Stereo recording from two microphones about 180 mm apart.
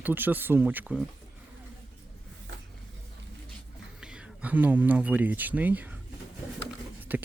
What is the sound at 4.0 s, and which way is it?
Speech, 5° right (ahead or behind).